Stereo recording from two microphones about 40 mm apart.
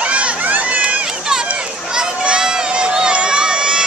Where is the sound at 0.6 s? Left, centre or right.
Right.